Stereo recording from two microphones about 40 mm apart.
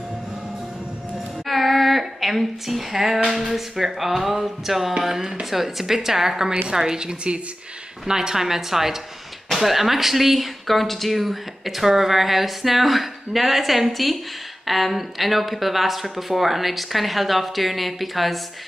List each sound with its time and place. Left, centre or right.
1.5 s a sound: centre
3.3 s music: centre
9.5 s speech: centre